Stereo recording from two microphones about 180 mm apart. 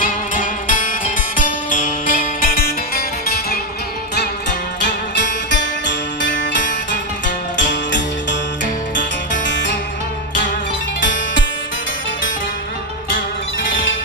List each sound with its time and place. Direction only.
0.0 s music: 50° left (ahead or behind)
4.8 s music: 75° left (ahead or behind)
11.0 s music: 90° left
13.7 s music: 90° left